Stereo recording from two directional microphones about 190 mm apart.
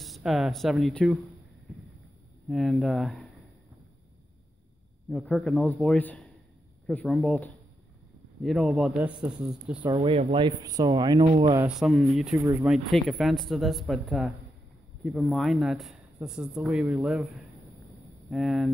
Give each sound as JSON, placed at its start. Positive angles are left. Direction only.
{"t": 0.0, "sound": "speech", "side_deg": 0}
{"t": 2.5, "sound": "speech", "side_deg": 0}
{"t": 5.1, "sound": "speech", "side_deg": 5}
{"t": 9.8, "sound": "speech", "side_deg": -30}
{"t": 11.8, "sound": "speech", "side_deg": 0}